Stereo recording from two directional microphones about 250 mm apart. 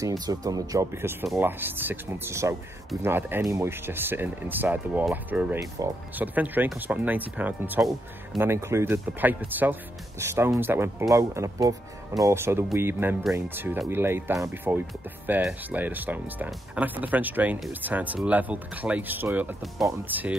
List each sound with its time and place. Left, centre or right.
0.0 s speech: centre